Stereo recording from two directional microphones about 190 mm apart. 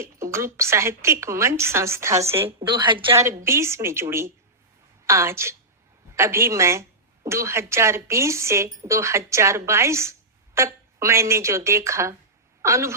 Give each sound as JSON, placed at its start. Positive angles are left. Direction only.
{"t": 0.0, "sound": "speech", "side_deg": -15}
{"t": 2.6, "sound": "speech", "side_deg": -25}